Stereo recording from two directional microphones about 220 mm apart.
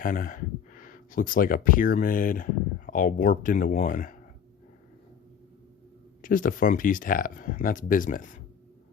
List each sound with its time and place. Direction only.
0.0 s speech: 40° left (ahead or behind)
6.2 s speech: 40° left (ahead or behind)